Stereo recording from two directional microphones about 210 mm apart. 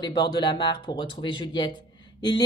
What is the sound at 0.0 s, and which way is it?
A woman's voice, 20° left (ahead or behind).